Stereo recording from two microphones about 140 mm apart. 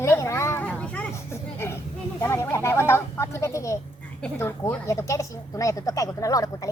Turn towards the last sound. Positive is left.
turn(degrees=25)  # may be behind; listen again after turning